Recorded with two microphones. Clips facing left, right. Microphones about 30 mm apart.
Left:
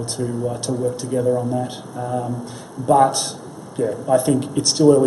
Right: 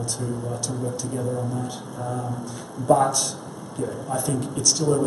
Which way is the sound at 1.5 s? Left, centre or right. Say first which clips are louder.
Left 6 dB; centre.